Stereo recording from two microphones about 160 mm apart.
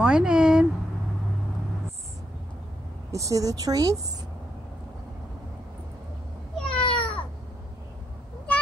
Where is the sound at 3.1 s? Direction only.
20° right (ahead or behind).